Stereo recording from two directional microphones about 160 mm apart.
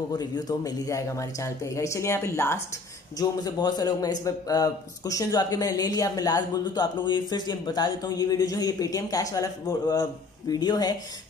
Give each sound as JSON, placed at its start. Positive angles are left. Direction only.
{"t": 0.1, "sound": "a man's voice", "side_deg": 25}